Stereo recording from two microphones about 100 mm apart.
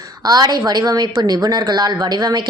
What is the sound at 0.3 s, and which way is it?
Speech, 45° right (ahead or behind).